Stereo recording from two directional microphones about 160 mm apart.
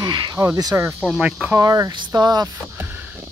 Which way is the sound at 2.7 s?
10° right (ahead or behind).